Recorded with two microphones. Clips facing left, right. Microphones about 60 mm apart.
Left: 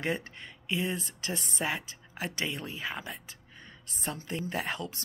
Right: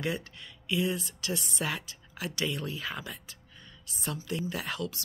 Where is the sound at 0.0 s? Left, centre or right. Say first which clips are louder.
Left 1 dB; left.